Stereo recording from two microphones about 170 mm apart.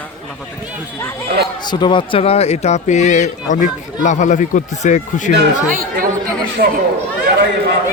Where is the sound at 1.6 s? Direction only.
25° left (ahead or behind); by 5.3 s 45° left (ahead or behind).